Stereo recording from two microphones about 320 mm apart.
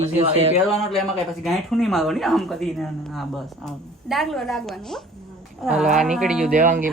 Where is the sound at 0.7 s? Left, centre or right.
Centre.